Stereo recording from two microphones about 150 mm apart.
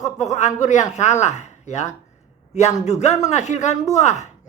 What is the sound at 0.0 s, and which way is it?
A man's voice, 50° left (ahead or behind).